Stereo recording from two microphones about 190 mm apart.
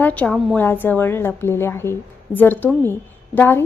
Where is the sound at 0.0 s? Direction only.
5° left (ahead or behind).